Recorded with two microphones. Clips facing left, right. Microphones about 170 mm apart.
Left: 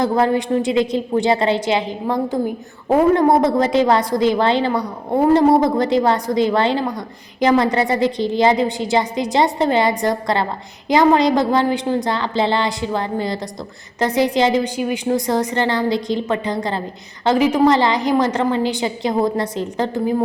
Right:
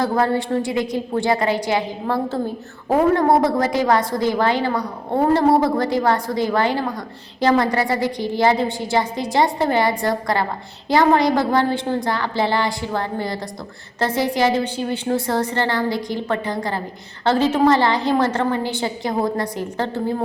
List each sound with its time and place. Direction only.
0.0 s a woman's voice: 20° left (ahead or behind)